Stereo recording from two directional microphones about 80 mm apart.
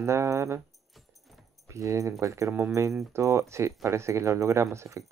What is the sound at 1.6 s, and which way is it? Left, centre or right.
Speech, right.